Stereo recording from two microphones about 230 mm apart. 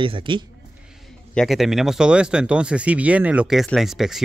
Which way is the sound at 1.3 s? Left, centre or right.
Centre.